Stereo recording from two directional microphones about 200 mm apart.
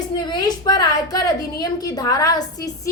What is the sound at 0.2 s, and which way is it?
A woman's voice, 20° left (ahead or behind).